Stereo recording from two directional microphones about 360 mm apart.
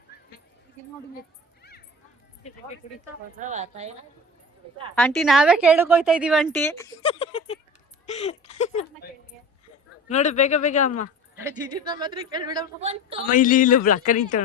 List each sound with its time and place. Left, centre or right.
2.8 s a man's voice: centre
3.4 s speech: centre
4.9 s a woman's voice: centre
10.1 s a man's voice: centre
11.4 s a woman's voice: centre
13.2 s a man's voice: left